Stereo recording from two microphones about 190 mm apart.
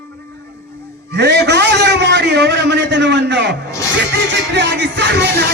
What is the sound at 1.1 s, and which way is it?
A man's voice, 65° right (ahead or behind).